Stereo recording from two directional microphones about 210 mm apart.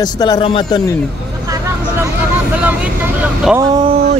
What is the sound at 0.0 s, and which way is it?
Speech, 20° left (ahead or behind).